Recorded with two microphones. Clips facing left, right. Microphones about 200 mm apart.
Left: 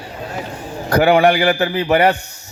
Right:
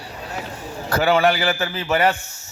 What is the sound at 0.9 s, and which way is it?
A man's voice, 45° left (ahead or behind).